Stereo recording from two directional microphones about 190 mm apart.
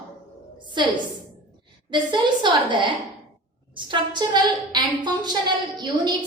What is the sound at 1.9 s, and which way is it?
A woman's voice, 25° right (ahead or behind).